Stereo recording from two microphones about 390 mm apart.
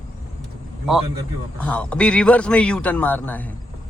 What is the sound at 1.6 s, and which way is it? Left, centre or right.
Speech, centre.